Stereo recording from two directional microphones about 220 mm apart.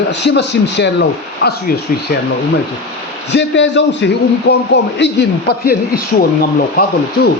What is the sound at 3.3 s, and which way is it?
A man's voice, 55° left (ahead or behind).